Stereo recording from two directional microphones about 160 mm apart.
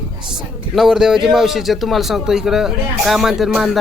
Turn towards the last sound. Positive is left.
turn(degrees=0)  # may be behind; listen again after turning